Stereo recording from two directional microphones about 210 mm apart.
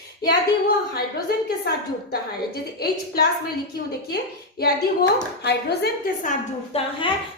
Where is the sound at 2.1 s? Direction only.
45° left (ahead or behind).